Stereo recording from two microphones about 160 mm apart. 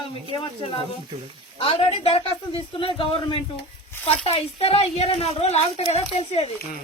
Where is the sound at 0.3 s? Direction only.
35° left (ahead or behind).